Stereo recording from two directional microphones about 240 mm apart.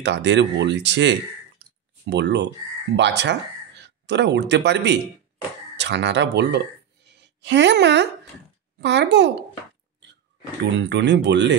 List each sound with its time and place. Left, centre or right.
0.0 s speech: right
1.6 s a sound: right
2.0 s a woman's voice: right
10.6 s speech: right